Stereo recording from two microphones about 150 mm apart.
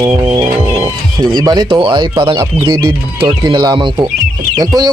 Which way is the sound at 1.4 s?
30° right (ahead or behind).